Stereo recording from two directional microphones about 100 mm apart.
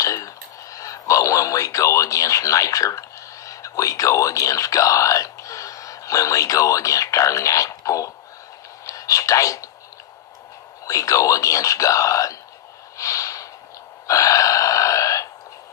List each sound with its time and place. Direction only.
0.0 s speech: 30° left (ahead or behind)
10.8 s speech: 35° left (ahead or behind)
13.0 s snort: 35° left (ahead or behind)
14.1 s a sound: 35° left (ahead or behind)